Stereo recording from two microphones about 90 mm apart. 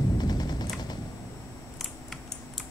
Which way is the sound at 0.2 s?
50° left (ahead or behind).